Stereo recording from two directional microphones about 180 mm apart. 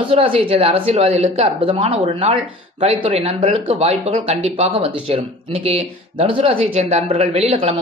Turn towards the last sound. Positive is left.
turn(degrees=-35)  # may be behind; listen again after turning